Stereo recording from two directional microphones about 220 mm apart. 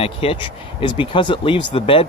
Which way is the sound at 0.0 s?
25° left (ahead or behind).